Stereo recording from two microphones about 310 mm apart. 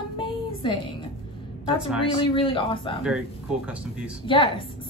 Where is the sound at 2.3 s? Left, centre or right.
Centre.